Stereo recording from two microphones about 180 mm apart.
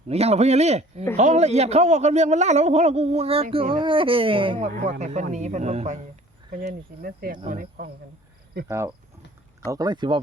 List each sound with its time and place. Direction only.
0.1 s a man's voice: 35° right (ahead or behind)
4.9 s a man's voice: 40° right (ahead or behind)
6.6 s cricket: 55° right (ahead or behind)
8.6 s speech: 15° right (ahead or behind)